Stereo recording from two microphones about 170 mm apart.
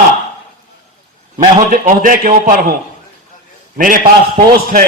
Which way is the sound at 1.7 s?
55° right (ahead or behind).